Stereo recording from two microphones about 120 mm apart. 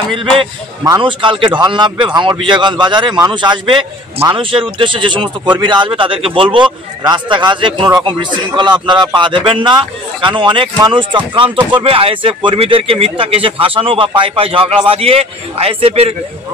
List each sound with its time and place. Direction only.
0.1 s speech: 45° right (ahead or behind)